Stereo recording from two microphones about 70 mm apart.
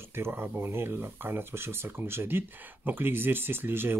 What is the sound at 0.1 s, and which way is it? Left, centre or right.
Speech, right.